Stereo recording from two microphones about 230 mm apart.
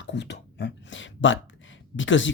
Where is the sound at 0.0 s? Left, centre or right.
Left.